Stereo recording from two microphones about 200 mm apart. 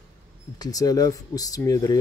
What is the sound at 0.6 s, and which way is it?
Speech, 20° left (ahead or behind).